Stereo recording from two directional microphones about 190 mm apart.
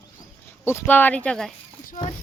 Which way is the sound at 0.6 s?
10° left (ahead or behind).